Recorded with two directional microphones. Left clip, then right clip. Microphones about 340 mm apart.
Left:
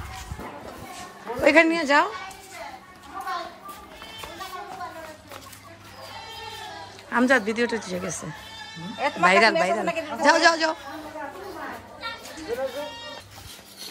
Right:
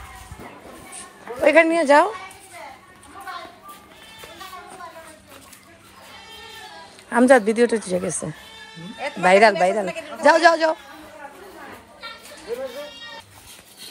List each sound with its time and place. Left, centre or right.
1.4 s speech: centre
7.1 s speech: centre
9.8 s a man's voice: left
10.2 s speech: centre